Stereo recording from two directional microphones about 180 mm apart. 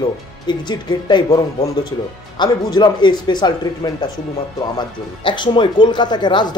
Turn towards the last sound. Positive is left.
turn(degrees=25)  # may be behind; listen again after turning